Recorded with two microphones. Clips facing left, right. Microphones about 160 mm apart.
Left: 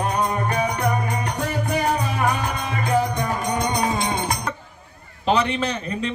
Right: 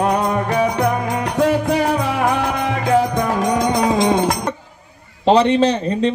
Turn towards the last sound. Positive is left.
turn(degrees=-30)  # may be behind; listen again after turning